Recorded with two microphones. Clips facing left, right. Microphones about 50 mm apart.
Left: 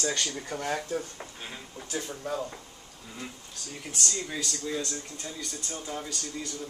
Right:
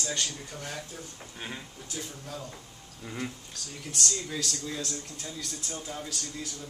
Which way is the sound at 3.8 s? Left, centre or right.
Centre.